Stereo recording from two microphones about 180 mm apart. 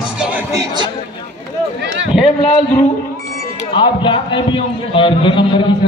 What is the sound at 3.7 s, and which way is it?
A man's voice, 25° left (ahead or behind).